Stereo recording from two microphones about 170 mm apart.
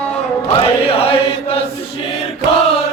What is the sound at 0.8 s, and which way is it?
Chant, 35° left (ahead or behind).